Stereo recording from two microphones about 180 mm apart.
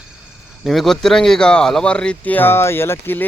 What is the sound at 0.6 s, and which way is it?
Speech, centre (ahead or behind).